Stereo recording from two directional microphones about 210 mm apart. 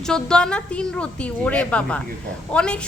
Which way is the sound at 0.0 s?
5° left (ahead or behind).